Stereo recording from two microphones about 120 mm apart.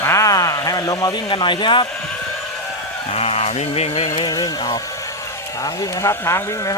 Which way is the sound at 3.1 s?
60° left (ahead or behind).